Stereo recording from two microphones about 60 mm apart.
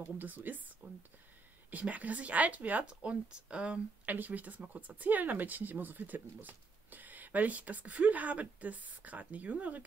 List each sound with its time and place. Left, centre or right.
0.2 s speech: right